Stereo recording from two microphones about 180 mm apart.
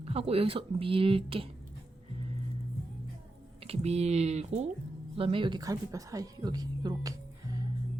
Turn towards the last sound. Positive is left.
turn(degrees=-20)  # may be behind; listen again after turning